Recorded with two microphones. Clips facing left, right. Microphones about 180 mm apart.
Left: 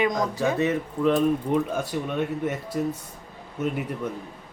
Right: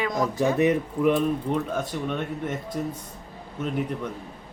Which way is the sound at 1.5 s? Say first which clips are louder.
Left 3 dB; 10° left (ahead or behind).